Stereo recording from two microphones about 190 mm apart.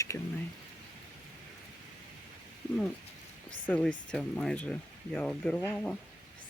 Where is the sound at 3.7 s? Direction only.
5° left (ahead or behind).